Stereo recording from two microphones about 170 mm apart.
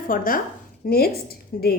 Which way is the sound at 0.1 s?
55° left (ahead or behind).